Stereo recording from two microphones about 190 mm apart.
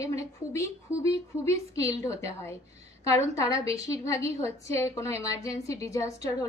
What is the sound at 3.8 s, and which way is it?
A woman's voice, 15° left (ahead or behind).